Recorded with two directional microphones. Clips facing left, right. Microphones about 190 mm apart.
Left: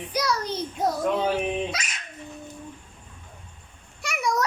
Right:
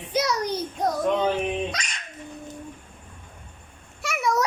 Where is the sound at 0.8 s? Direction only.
5° left (ahead or behind).